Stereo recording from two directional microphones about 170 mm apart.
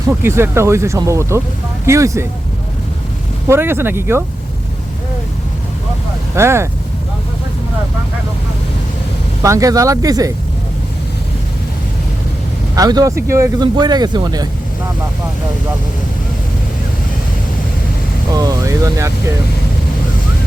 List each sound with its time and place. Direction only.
0.2 s speech: 15° right (ahead or behind)
3.5 s speech: 15° right (ahead or behind)
6.3 s speech: 15° right (ahead or behind)
9.4 s speech: 20° right (ahead or behind)
12.7 s speech: 20° right (ahead or behind)
18.3 s speech: 20° right (ahead or behind)